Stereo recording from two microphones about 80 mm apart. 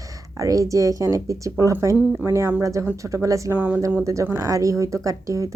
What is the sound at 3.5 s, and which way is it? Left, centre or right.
Speech, right.